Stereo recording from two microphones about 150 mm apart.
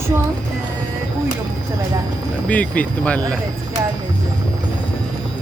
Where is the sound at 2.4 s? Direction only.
10° left (ahead or behind).